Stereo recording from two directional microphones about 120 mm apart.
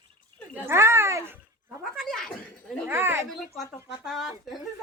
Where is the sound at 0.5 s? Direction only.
20° right (ahead or behind).